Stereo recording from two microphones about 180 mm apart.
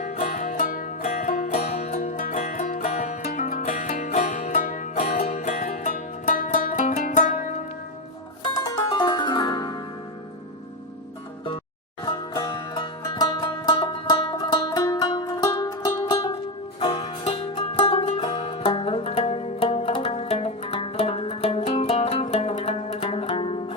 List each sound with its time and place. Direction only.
0.0 s music: 45° left (ahead or behind)
5.3 s music: 40° left (ahead or behind)
8.7 s music: 25° left (ahead or behind)
12.3 s music: 20° left (ahead or behind)